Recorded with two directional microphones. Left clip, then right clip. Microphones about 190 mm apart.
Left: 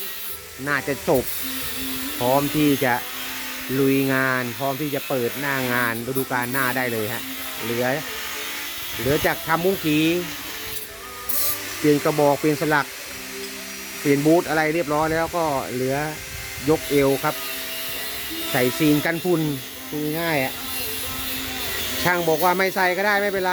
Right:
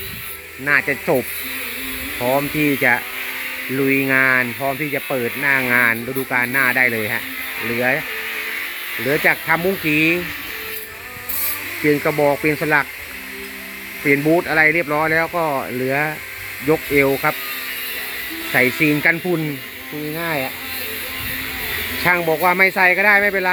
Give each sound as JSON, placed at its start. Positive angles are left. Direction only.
{"t": 0.6, "sound": "speech", "side_deg": 0}
{"t": 2.2, "sound": "speech", "side_deg": 5}
{"t": 9.0, "sound": "speech", "side_deg": 0}
{"t": 11.9, "sound": "speech", "side_deg": 0}
{"t": 14.1, "sound": "speech", "side_deg": 0}
{"t": 18.5, "sound": "speech", "side_deg": 5}
{"t": 20.1, "sound": "speech", "side_deg": 15}
{"t": 22.0, "sound": "speech", "side_deg": 0}